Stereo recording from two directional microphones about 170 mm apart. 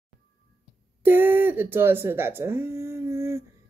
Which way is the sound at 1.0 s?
10° right (ahead or behind).